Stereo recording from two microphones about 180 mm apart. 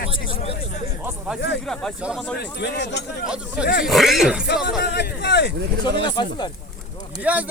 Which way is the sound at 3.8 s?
Centre (ahead or behind).